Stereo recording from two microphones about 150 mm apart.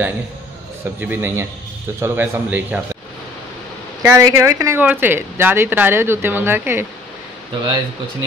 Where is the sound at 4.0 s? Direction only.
20° right (ahead or behind).